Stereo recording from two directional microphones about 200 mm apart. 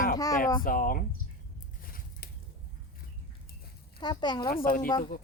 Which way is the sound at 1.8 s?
45° left (ahead or behind).